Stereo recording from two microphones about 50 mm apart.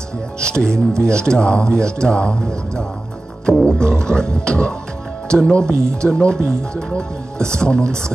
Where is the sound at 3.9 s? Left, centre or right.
Centre.